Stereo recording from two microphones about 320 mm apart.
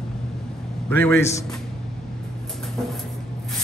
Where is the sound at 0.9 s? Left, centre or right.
Centre.